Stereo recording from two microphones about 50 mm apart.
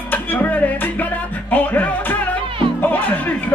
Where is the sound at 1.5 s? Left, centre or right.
Left.